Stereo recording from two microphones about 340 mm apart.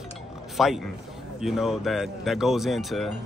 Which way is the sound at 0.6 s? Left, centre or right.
Centre.